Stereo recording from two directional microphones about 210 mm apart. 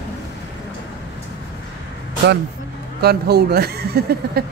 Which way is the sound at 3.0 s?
50° right (ahead or behind).